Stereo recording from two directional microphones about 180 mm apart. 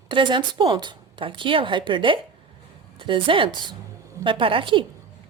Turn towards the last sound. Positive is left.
turn(degrees=-30)  # may be behind; listen again after turning